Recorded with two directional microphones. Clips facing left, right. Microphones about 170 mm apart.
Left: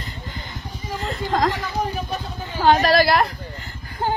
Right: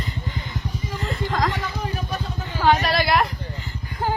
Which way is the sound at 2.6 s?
35° left (ahead or behind).